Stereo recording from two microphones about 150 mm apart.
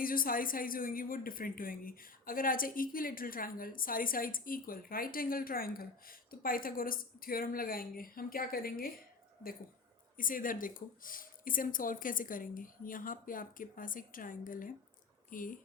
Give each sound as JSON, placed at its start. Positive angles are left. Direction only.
{"t": 0.0, "sound": "speech", "side_deg": 70}
{"t": 10.2, "sound": "speech", "side_deg": 65}